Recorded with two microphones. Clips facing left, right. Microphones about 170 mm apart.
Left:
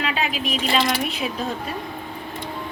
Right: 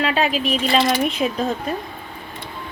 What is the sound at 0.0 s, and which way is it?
Speech, 40° right (ahead or behind).